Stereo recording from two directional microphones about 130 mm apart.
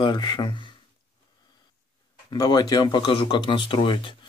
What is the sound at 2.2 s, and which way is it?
Speech, 30° left (ahead or behind).